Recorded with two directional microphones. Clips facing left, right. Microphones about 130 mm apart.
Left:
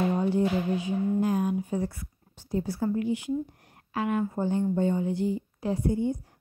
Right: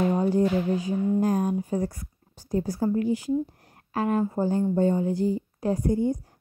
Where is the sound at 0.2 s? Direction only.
40° right (ahead or behind).